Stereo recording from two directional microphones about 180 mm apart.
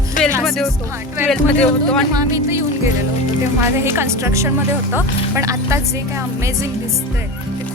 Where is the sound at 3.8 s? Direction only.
15° right (ahead or behind).